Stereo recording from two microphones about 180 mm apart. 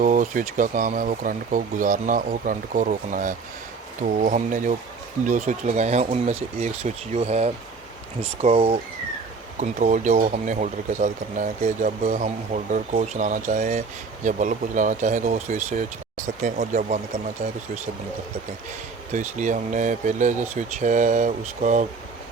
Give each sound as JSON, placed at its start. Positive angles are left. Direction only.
{"t": 0.0, "sound": "speech", "side_deg": -45}
{"t": 9.6, "sound": "speech", "side_deg": -45}
{"t": 19.1, "sound": "speech", "side_deg": -45}